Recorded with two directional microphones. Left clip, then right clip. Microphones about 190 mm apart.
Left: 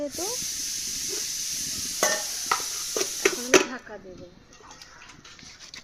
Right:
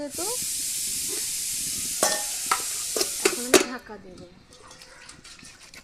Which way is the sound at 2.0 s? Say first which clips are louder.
Even; 25° right (ahead or behind).